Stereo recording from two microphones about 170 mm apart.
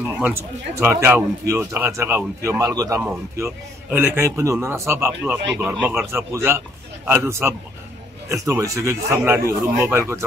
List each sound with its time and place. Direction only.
0.2 s a man's voice: 15° right (ahead or behind)